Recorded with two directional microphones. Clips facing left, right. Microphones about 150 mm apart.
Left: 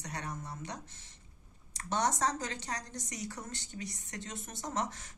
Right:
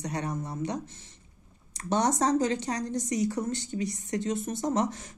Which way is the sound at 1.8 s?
20° right (ahead or behind).